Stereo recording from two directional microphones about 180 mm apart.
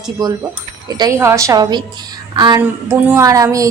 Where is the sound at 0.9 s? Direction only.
20° right (ahead or behind).